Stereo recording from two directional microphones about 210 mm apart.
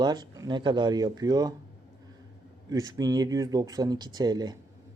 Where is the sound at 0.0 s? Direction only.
20° right (ahead or behind).